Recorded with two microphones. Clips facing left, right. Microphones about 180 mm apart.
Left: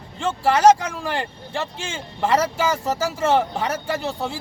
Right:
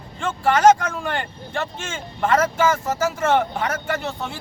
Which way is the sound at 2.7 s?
35° left (ahead or behind).